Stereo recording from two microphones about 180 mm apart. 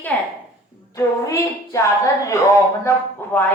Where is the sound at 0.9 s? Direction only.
15° left (ahead or behind).